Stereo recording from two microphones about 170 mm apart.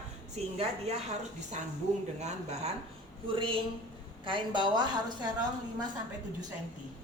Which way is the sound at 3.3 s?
30° right (ahead or behind).